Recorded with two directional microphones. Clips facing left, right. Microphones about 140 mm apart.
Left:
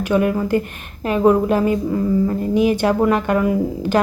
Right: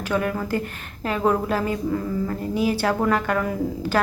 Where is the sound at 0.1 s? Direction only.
20° left (ahead or behind).